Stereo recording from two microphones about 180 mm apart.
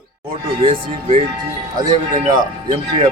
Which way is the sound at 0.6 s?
30° right (ahead or behind).